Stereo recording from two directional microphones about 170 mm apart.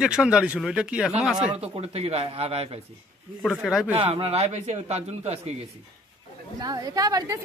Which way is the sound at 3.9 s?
30° right (ahead or behind).